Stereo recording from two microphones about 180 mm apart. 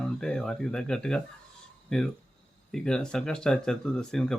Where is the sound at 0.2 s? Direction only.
5° left (ahead or behind).